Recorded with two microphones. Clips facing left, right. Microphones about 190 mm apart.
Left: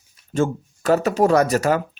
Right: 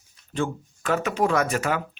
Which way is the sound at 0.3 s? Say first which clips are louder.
Left 6 dB; 40° left (ahead or behind).